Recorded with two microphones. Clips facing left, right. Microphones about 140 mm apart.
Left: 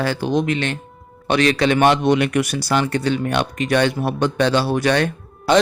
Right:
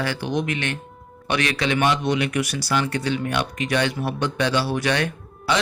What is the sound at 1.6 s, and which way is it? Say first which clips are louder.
Speech: left 6 dB; 50° left (ahead or behind).